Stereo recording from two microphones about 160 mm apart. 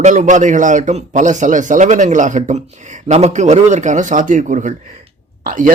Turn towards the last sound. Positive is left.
turn(degrees=-60)  # may be behind; listen again after turning